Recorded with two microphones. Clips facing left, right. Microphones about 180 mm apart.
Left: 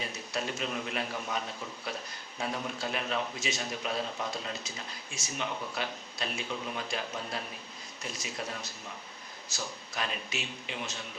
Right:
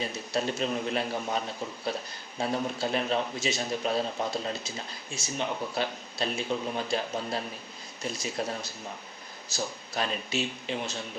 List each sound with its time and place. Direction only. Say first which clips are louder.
0.3 s speech: right 5 dB; 30° right (ahead or behind)